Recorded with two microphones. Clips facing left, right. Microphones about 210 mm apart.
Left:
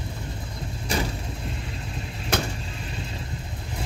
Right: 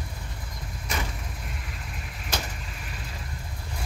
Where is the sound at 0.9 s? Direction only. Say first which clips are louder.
Left 6 dB; 30° left (ahead or behind).